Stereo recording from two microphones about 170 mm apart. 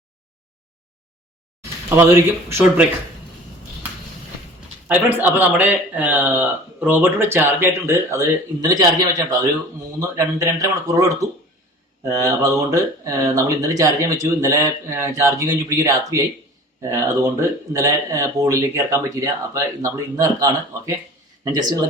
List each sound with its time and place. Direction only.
2.0 s speech: 15° right (ahead or behind)
4.9 s speech: 10° right (ahead or behind)